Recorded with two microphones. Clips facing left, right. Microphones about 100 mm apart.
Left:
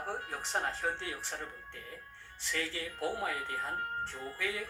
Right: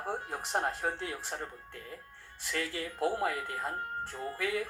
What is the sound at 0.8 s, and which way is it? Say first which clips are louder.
Speech: right 1 dB; 45° right (ahead or behind).